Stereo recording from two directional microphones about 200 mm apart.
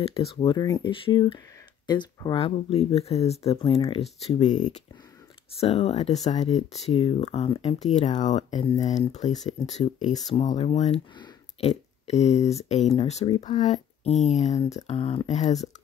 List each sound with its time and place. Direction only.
0.0 s speech: 30° left (ahead or behind)